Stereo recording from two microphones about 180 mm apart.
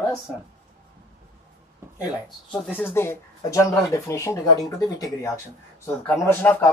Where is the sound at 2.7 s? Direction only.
10° left (ahead or behind).